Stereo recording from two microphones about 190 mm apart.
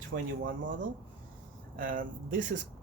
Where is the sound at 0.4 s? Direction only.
75° right (ahead or behind).